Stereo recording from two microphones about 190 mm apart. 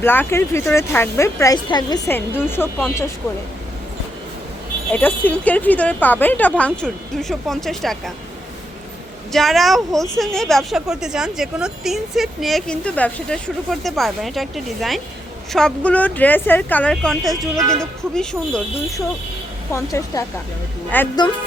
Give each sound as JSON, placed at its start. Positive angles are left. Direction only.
{"t": 0.0, "sound": "speech", "side_deg": 10}
{"t": 2.0, "sound": "speech", "side_deg": 10}
{"t": 4.9, "sound": "speech", "side_deg": 10}
{"t": 9.3, "sound": "a woman's voice", "side_deg": 0}
{"t": 19.7, "sound": "speech", "side_deg": 15}